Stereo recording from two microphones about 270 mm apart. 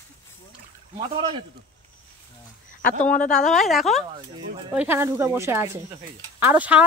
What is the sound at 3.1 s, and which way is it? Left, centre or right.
A woman's voice, centre.